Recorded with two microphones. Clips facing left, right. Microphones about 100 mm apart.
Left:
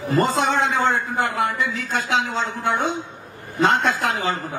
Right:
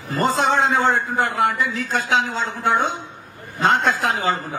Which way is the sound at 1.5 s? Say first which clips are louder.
Right 1 dB; 40° right (ahead or behind).